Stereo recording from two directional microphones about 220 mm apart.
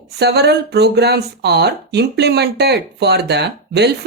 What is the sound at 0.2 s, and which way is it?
Speech, 50° right (ahead or behind).